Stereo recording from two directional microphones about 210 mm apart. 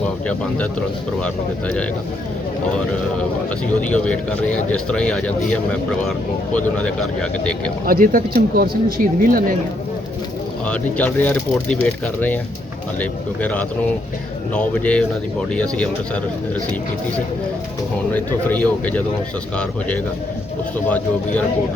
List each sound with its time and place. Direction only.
0.0 s speech: 5° left (ahead or behind)
3.8 s speech: 5° left (ahead or behind)
7.9 s speech: 45° right (ahead or behind)
10.7 s speech: 5° left (ahead or behind)
18.1 s speech: 10° left (ahead or behind)
20.7 s speech: 5° left (ahead or behind)